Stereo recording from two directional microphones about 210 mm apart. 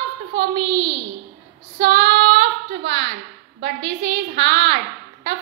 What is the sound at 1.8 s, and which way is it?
Child singing, 55° right (ahead or behind).